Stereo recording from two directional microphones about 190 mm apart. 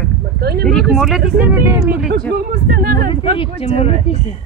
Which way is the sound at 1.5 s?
15° right (ahead or behind).